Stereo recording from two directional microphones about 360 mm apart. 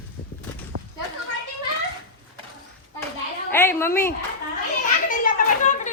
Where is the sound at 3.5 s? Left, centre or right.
Centre.